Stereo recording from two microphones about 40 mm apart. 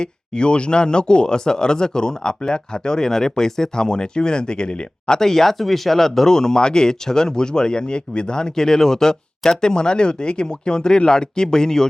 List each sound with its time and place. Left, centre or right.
0.0 s speech: left
5.1 s speech: centre